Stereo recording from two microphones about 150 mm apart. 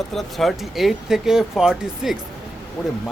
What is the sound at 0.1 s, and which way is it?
Speech, centre (ahead or behind).